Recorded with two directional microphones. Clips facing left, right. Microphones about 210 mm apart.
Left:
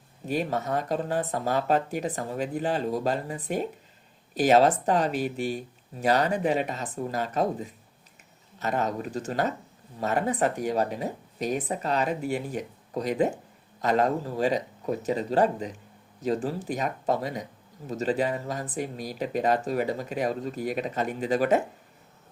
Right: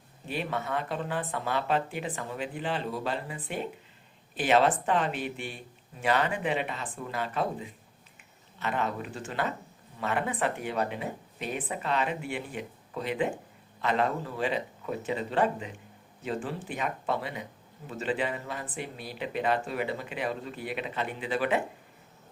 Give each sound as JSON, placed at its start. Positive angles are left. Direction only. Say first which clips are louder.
{"t": 0.3, "sound": "speech", "louder": "left 5 dB", "side_deg": 40}